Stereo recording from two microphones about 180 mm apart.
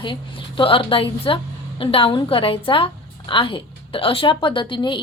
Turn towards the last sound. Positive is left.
turn(degrees=25)  # may be behind; listen again after turning